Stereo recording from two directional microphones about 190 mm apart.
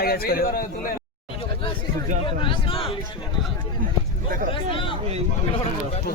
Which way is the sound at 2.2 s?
25° left (ahead or behind).